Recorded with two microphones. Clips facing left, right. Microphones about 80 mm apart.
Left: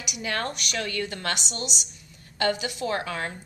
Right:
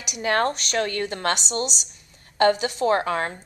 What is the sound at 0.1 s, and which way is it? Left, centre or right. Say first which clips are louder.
Speech: right 8 dB; right.